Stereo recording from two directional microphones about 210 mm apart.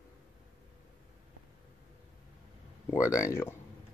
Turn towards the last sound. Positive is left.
turn(degrees=10)  # may be behind; listen again after turning